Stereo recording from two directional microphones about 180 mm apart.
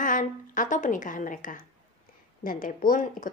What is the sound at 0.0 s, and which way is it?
A woman's voice, 45° left (ahead or behind).